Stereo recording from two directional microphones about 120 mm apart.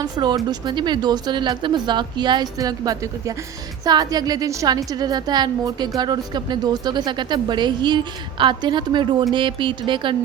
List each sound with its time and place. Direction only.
0.0 s a woman's voice: 35° right (ahead or behind)